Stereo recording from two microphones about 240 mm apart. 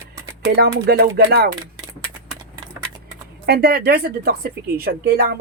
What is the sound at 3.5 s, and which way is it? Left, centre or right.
Speech, right.